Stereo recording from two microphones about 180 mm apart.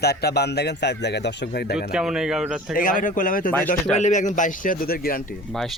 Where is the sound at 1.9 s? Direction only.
5° right (ahead or behind).